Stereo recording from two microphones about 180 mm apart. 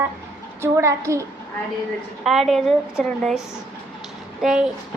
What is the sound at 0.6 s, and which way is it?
Speech, 15° right (ahead or behind).